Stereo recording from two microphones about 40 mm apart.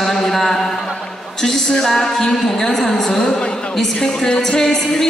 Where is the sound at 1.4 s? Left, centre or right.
Centre.